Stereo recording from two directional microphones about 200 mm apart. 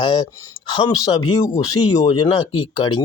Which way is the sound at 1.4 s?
20° left (ahead or behind).